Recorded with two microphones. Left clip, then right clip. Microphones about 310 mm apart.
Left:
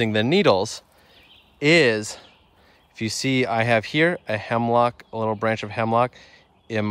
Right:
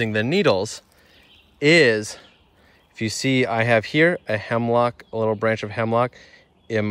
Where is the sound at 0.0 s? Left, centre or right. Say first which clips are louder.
Left 1 dB; centre.